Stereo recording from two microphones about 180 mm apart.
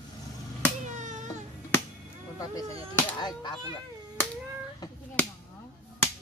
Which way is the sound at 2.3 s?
20° left (ahead or behind).